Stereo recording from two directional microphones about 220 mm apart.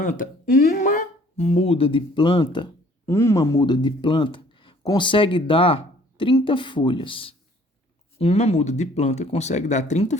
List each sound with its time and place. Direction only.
0.0 s speech: 35° left (ahead or behind)